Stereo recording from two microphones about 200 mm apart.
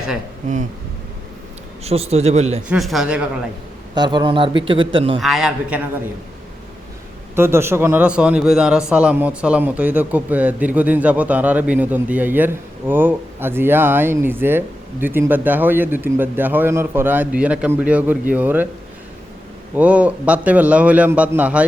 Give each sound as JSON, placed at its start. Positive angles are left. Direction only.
{"t": 1.8, "sound": "speech", "side_deg": -30}
{"t": 2.6, "sound": "speech", "side_deg": 0}
{"t": 3.9, "sound": "a man's voice", "side_deg": -20}
{"t": 5.2, "sound": "speech", "side_deg": 0}
{"t": 7.3, "sound": "a man's voice", "side_deg": -10}
{"t": 19.7, "sound": "a man's voice", "side_deg": -5}